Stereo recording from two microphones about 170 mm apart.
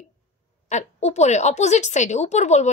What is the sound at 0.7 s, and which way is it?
A woman's voice, 40° left (ahead or behind).